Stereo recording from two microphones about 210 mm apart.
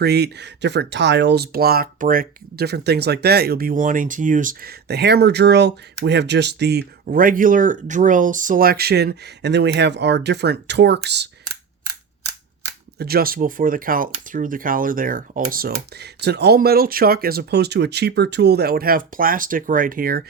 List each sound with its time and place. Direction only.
0.0 s speech: 50° right (ahead or behind)
13.0 s speech: 45° right (ahead or behind)